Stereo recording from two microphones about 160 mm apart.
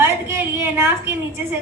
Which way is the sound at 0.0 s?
15° right (ahead or behind).